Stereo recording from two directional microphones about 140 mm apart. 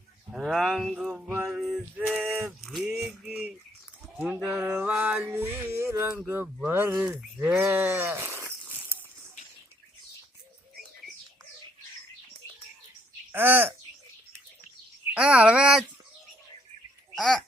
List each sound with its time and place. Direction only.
0.3 s speech: centre (ahead or behind)
1.1 s music: 15° right (ahead or behind)
1.5 s male singing: 5° right (ahead or behind)
2.6 s a sound: centre (ahead or behind); by 6.1 s 15° right (ahead or behind)
6.2 s speech: 15° right (ahead or behind)
7.5 s livestock: 15° right (ahead or behind)
13.3 s speech: 15° right (ahead or behind)
15.1 s speech: 10° right (ahead or behind)